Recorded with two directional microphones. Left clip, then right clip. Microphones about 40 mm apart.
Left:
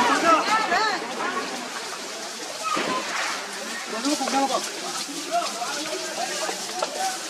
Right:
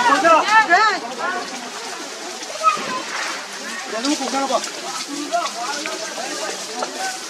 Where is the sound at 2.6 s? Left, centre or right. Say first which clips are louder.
Right 9 dB; centre.